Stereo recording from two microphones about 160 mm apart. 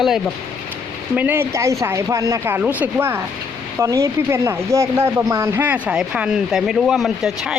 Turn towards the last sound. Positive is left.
turn(degrees=0)  # may be behind; listen again after turning